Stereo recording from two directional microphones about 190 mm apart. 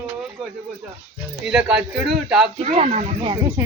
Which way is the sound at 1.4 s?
5° right (ahead or behind).